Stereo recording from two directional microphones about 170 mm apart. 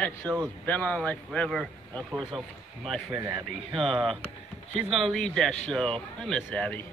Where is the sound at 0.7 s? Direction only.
10° left (ahead or behind).